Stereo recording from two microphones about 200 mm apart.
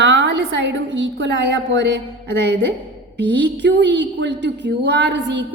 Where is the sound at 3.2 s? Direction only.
60° right (ahead or behind).